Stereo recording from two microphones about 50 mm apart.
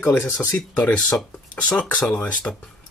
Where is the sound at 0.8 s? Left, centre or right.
Left.